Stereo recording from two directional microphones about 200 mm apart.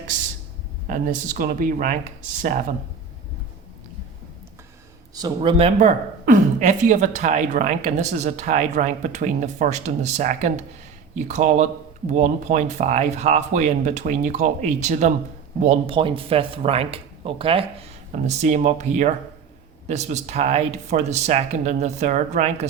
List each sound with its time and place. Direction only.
0.9 s speech: 40° right (ahead or behind)
5.1 s speech: 20° right (ahead or behind)